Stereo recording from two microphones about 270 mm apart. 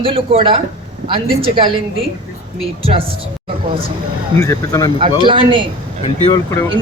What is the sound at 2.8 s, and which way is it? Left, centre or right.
Speech, right.